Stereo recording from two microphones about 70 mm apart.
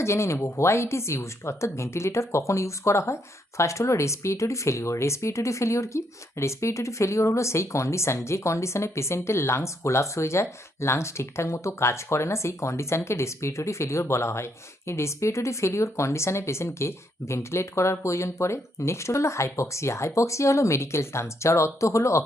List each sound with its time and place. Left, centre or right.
0.0 s speech: left